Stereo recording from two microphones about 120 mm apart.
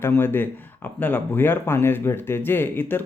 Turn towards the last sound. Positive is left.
turn(degrees=15)  # may be behind; listen again after turning